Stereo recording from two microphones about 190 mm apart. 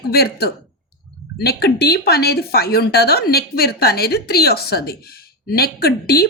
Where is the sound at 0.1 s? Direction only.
55° left (ahead or behind).